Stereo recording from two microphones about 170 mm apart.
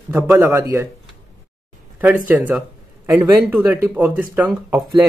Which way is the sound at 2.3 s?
10° right (ahead or behind).